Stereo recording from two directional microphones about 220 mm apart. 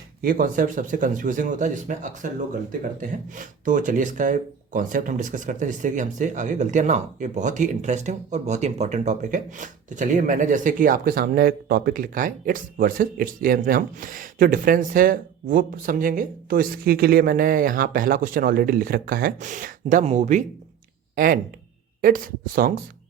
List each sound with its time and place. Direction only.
0.2 s speech: 40° right (ahead or behind)
22.0 s speech: 40° right (ahead or behind)